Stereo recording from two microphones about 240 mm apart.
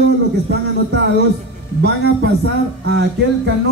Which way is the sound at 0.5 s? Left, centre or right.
Right.